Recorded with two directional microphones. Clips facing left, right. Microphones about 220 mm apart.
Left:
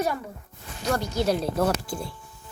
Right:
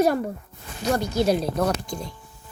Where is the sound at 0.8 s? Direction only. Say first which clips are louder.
Right 3 dB; 15° right (ahead or behind).